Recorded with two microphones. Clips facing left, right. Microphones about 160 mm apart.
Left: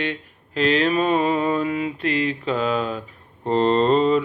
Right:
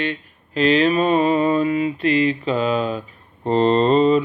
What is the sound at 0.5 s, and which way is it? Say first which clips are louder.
Mantra: right 3 dB; 5° right (ahead or behind).